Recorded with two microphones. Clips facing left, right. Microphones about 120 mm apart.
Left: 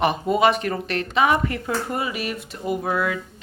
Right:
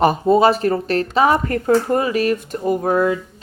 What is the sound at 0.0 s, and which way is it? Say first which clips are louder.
Speech: right 5 dB; 35° right (ahead or behind).